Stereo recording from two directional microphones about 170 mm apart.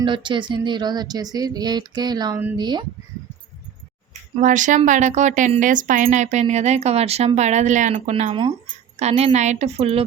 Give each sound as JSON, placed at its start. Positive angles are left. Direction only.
{"t": 0.0, "sound": "speech", "side_deg": -30}
{"t": 4.1, "sound": "a woman's voice", "side_deg": -45}